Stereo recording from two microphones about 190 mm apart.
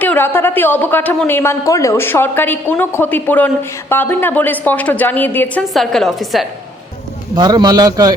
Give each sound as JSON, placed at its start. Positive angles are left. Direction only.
{"t": 0.0, "sound": "speech", "side_deg": 10}
{"t": 7.3, "sound": "a man's voice", "side_deg": -20}